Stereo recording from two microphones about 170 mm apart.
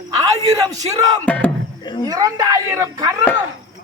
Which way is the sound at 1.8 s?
25° left (ahead or behind).